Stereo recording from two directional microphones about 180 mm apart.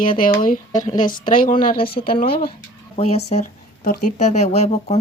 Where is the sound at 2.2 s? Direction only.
55° left (ahead or behind).